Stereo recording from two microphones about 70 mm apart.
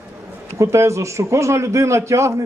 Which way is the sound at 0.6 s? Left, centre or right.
Right.